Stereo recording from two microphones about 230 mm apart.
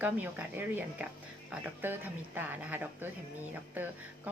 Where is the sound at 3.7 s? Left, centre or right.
Centre.